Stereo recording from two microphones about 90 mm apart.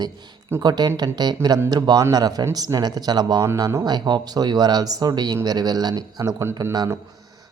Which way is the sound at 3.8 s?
50° right (ahead or behind).